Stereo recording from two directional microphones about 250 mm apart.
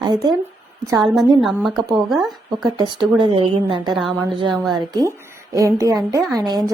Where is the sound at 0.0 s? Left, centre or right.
Centre.